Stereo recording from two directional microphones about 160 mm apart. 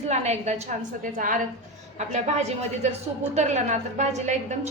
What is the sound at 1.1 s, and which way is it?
Speech, 55° right (ahead or behind).